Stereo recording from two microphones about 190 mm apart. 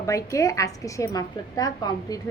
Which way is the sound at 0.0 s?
15° left (ahead or behind).